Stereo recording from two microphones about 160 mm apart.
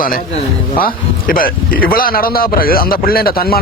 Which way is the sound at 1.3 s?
60° left (ahead or behind).